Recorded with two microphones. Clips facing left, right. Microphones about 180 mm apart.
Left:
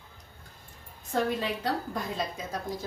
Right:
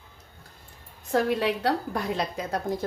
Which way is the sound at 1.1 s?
70° right (ahead or behind).